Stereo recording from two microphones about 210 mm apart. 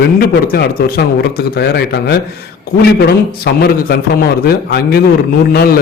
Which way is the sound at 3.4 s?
45° left (ahead or behind).